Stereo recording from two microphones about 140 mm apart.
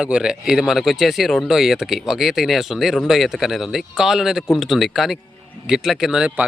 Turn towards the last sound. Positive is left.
turn(degrees=-5)  # may be behind; listen again after turning